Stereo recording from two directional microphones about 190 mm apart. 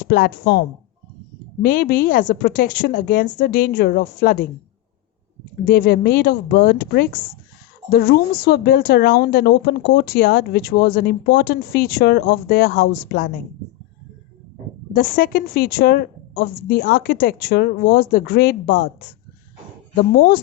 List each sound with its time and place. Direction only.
0.0 s a woman's voice: 50° left (ahead or behind)
1.6 s a woman's voice: 45° left (ahead or behind)
5.6 s a woman's voice: 50° left (ahead or behind)
15.1 s speech: 50° left (ahead or behind)
20.1 s speech: 60° left (ahead or behind)